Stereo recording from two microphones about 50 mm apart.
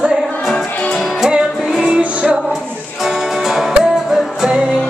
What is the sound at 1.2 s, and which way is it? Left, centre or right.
Music, centre.